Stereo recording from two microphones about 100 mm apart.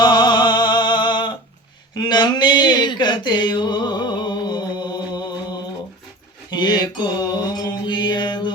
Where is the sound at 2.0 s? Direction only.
45° left (ahead or behind).